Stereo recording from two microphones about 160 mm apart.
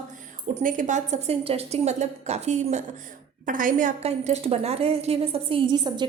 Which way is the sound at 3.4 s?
60° right (ahead or behind).